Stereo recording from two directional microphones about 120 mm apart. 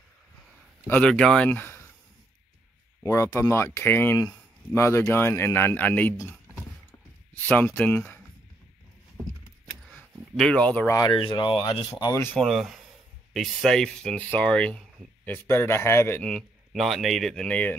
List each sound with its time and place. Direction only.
0.8 s speech: 10° left (ahead or behind)
3.0 s a man's voice: 25° left (ahead or behind)
7.4 s speech: 15° left (ahead or behind)
10.3 s speech: 5° left (ahead or behind)
10.9 s speech: 35° left (ahead or behind)
12.1 s a man's voice: 20° left (ahead or behind)
12.4 s a man's voice: centre (ahead or behind); by 16.2 s 20° left (ahead or behind)
16.2 s a man's voice: centre (ahead or behind)